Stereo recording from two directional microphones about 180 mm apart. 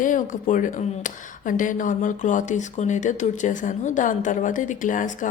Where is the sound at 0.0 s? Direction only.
45° left (ahead or behind).